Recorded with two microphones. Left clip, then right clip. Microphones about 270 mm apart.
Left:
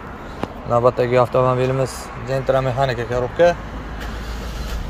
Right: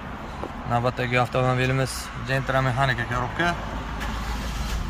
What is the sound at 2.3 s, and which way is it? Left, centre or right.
Speech, centre.